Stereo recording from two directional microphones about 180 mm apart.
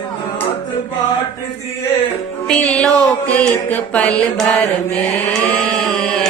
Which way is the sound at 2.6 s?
5° left (ahead or behind).